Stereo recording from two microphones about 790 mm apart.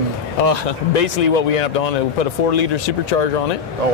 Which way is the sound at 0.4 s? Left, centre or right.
Left.